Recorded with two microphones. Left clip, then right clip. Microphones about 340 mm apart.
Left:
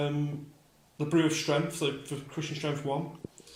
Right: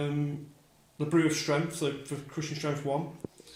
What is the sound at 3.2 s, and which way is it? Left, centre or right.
Drip, right.